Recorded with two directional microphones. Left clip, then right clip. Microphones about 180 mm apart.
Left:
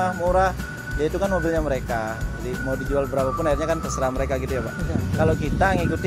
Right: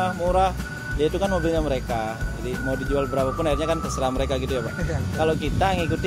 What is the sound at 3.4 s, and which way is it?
Speech, 10° right (ahead or behind).